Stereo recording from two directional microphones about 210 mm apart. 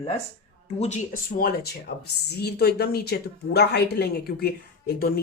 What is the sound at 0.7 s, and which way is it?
Speech, 35° left (ahead or behind).